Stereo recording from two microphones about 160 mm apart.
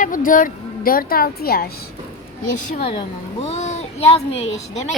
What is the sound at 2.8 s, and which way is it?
A child's voice, 35° left (ahead or behind).